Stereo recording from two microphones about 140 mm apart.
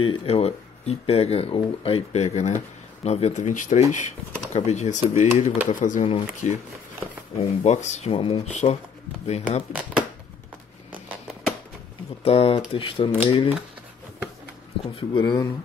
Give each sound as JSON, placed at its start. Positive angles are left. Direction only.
{"t": 0.0, "sound": "speech", "side_deg": 40}
{"t": 7.3, "sound": "speech", "side_deg": 55}
{"t": 9.7, "sound": "speech", "side_deg": -5}
{"t": 10.9, "sound": "a sound", "side_deg": -10}
{"t": 12.3, "sound": "speech", "side_deg": 45}
{"t": 14.8, "sound": "speech", "side_deg": 35}